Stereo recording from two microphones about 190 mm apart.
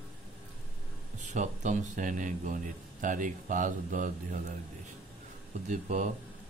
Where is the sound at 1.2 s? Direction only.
40° right (ahead or behind).